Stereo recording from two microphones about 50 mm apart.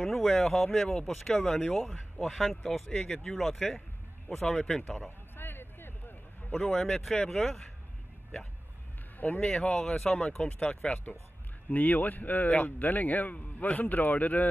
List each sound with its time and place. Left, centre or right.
0.0 s speech: centre
2.3 s speech: centre
2.9 s speech: centre
3.2 s speech: centre
5.3 s a sound: left
6.6 s speech: centre
9.5 s speech: centre
11.7 s speech: left